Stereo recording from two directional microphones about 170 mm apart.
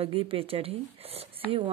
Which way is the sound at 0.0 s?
35° right (ahead or behind).